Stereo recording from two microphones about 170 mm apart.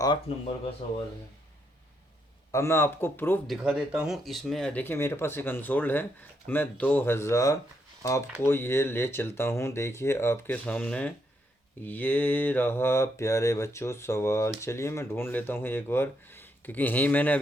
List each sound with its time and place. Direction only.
0.3 s speech: 35° left (ahead or behind)
2.5 s speech: 15° left (ahead or behind)
3.7 s speech: 5° right (ahead or behind)